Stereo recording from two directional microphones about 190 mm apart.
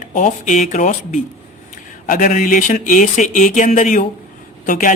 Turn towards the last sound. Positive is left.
turn(degrees=45)  # may be behind; listen again after turning